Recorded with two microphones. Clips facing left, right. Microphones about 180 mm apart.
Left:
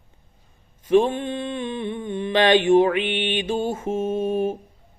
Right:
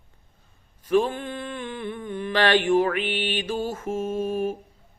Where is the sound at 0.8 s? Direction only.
25° left (ahead or behind).